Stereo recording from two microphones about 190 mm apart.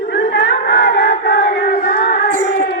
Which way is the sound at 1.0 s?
45° left (ahead or behind).